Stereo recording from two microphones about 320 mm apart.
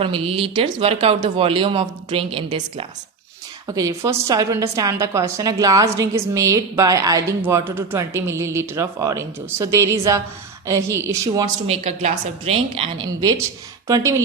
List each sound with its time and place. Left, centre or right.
0.0 s speech: centre